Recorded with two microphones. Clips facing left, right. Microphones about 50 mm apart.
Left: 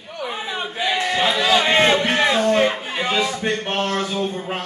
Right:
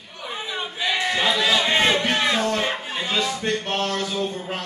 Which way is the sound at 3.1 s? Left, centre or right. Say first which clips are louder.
Left 2 dB; left.